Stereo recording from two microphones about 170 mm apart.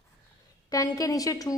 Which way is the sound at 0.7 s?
20° left (ahead or behind).